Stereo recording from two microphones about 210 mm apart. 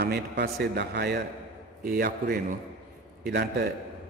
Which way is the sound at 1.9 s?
40° right (ahead or behind).